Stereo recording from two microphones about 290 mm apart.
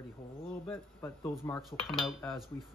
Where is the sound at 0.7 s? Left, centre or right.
Centre.